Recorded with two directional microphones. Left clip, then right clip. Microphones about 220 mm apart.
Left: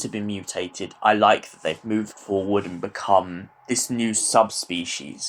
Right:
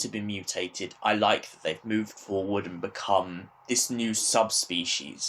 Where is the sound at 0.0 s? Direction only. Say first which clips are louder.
Left 3 dB; 25° left (ahead or behind).